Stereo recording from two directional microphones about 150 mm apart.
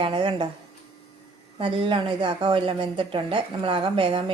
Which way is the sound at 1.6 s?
35° right (ahead or behind).